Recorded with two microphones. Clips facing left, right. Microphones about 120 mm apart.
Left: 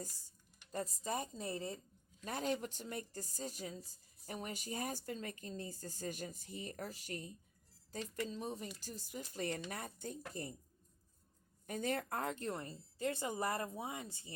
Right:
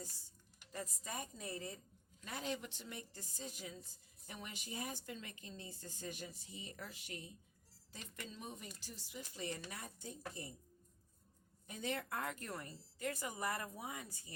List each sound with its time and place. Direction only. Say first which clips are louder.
0.7 s a woman's voice: left 7 dB; 35° left (ahead or behind); by 10.5 s 50° left (ahead or behind)
11.6 s a woman's voice: left 4 dB; 45° left (ahead or behind); by 14.3 s 25° left (ahead or behind)